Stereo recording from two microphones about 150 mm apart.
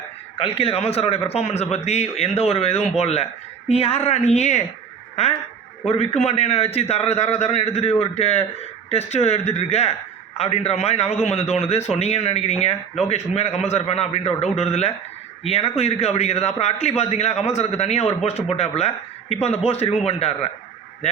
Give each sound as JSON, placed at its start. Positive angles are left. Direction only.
{"t": 0.4, "sound": "a man's voice", "side_deg": 40}
{"t": 5.8, "sound": "a man's voice", "side_deg": 45}